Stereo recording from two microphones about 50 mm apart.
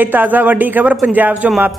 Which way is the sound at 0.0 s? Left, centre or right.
Right.